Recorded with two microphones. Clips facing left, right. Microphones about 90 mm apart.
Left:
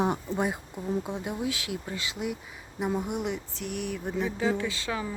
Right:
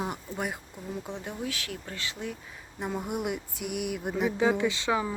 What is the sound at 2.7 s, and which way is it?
Speech, 5° left (ahead or behind).